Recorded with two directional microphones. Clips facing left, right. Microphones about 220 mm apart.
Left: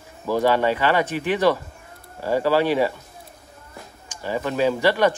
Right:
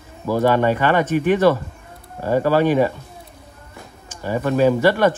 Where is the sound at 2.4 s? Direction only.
45° right (ahead or behind).